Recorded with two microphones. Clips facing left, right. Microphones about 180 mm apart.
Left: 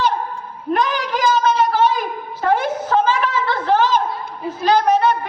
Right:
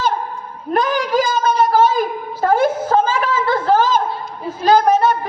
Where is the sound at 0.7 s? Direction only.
40° right (ahead or behind).